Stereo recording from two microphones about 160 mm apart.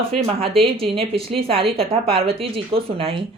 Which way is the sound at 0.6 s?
35° right (ahead or behind).